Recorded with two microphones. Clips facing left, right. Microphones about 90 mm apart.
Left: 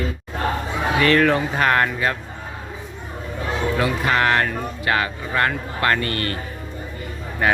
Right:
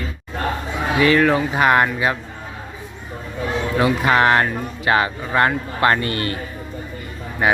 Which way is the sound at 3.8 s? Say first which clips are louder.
Right 5 dB; 25° right (ahead or behind).